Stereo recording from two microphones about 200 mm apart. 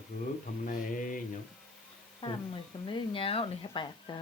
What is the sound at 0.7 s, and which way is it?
Mantra, 45° left (ahead or behind).